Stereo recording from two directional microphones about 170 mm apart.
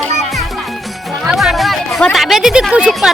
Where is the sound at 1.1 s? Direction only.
Centre (ahead or behind).